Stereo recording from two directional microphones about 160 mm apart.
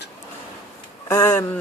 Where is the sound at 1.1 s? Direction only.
15° left (ahead or behind).